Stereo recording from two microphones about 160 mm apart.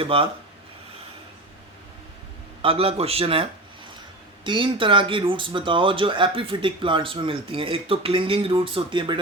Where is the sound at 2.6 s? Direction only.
35° right (ahead or behind).